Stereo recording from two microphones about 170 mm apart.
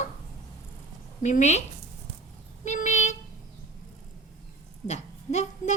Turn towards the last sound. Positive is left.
turn(degrees=40)  # may be behind; listen again after turning